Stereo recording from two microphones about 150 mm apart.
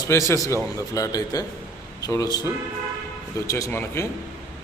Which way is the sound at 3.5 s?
20° left (ahead or behind).